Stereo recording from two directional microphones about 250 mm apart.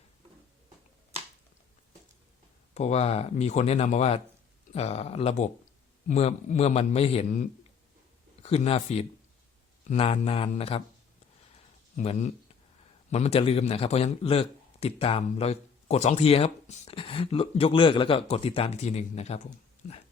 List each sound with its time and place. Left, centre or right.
2.7 s a man's voice: left
8.4 s a man's voice: left
11.9 s a man's voice: left